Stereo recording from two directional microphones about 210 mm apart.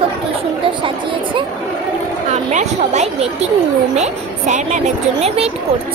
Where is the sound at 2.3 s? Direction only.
35° right (ahead or behind).